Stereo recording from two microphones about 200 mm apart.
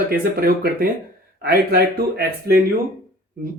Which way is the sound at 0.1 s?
50° right (ahead or behind).